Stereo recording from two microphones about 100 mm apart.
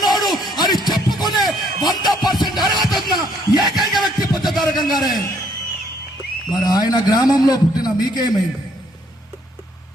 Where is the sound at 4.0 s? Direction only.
45° left (ahead or behind).